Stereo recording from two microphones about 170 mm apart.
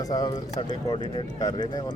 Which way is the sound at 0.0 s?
20° left (ahead or behind).